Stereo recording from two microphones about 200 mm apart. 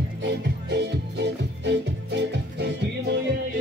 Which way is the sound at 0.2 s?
55° right (ahead or behind).